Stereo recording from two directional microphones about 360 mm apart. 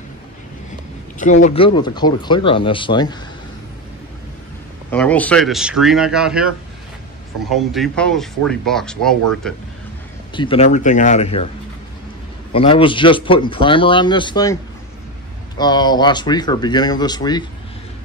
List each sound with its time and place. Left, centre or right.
1.2 s speech: centre
4.9 s speech: centre
7.5 s speech: centre
10.3 s speech: centre
12.5 s speech: centre